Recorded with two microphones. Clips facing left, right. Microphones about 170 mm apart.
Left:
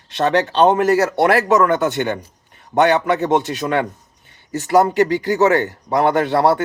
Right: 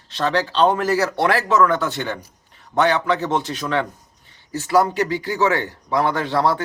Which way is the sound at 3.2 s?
20° left (ahead or behind).